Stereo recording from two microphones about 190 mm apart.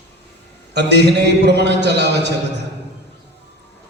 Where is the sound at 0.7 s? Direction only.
60° right (ahead or behind).